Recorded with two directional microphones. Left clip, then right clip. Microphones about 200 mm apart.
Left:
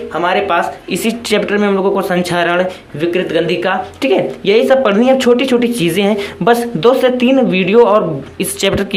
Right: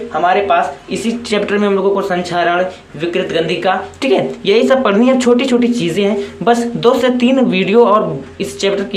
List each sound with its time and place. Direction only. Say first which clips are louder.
0.1 s speech: right 2 dB; 30° left (ahead or behind)
1.5 s speech: even; 15° left (ahead or behind)
2.0 s speech: left 1 dB; 30° left (ahead or behind)
3.0 s speech: left 1 dB; 20° left (ahead or behind)
8.4 s speech: left 1 dB; 30° left (ahead or behind)